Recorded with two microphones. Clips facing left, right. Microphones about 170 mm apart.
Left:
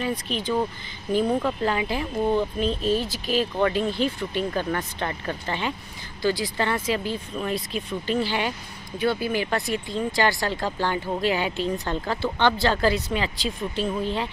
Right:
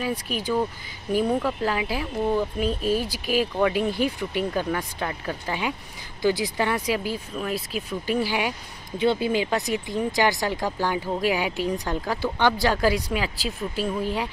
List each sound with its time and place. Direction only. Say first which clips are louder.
0.0 s speech: even; 10° right (ahead or behind)
8.9 s speech: right 2 dB; 20° right (ahead or behind)